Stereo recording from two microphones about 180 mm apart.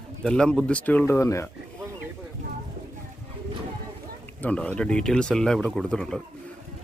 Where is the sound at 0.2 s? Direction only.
5° left (ahead or behind).